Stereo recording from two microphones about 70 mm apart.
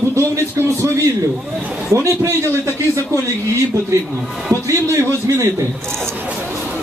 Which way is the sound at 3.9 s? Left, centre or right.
Right.